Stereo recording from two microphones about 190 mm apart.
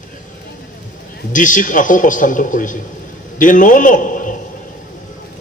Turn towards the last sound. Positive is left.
turn(degrees=45)  # may be behind; listen again after turning